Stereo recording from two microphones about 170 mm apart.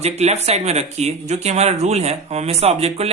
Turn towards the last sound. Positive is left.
turn(degrees=-35)  # may be behind; listen again after turning